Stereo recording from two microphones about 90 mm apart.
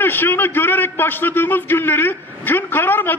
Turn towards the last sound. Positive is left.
turn(degrees=25)  # may be behind; listen again after turning